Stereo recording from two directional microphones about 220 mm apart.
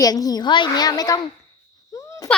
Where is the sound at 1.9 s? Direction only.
15° left (ahead or behind).